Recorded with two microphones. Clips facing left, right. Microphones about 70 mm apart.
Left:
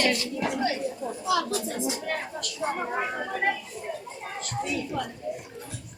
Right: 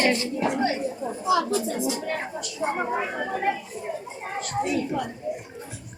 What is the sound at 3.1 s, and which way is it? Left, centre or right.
Speech, right.